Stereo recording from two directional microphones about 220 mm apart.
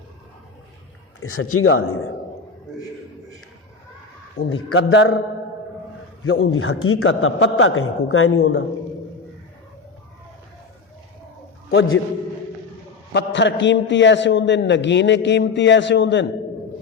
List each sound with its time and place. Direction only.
1.2 s speech: 75° left (ahead or behind)
4.4 s a man's voice: 65° left (ahead or behind)
6.2 s a man's voice: 65° left (ahead or behind)
11.7 s a man's voice: 65° left (ahead or behind)
13.1 s a man's voice: 55° left (ahead or behind)